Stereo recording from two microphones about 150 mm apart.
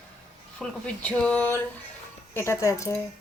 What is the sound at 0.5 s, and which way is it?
Speech, 5° left (ahead or behind).